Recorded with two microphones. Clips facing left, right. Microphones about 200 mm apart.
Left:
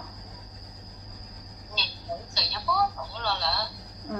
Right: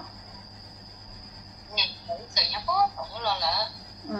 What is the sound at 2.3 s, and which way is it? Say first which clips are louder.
Speech: right 1 dB; 10° right (ahead or behind).